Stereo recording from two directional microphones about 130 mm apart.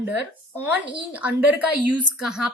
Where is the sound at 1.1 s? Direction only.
10° right (ahead or behind).